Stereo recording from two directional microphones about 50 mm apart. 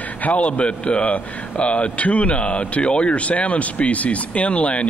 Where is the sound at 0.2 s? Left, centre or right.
Left.